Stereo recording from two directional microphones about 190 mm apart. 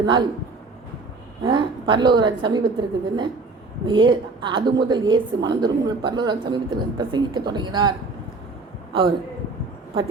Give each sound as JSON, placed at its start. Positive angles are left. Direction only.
{"t": 0.0, "sound": "a woman's voice", "side_deg": -25}
{"t": 1.5, "sound": "a woman's voice", "side_deg": -25}